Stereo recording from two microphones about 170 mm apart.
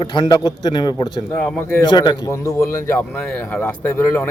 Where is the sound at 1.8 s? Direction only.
25° left (ahead or behind).